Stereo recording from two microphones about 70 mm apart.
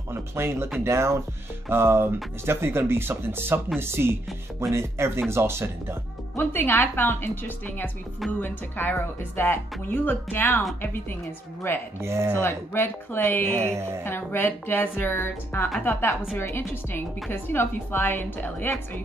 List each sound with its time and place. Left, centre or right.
0.1 s speech: right
6.3 s a woman's voice: left
12.0 s speech: right
12.4 s a woman's voice: left
13.7 s speech: right
14.0 s a woman's voice: left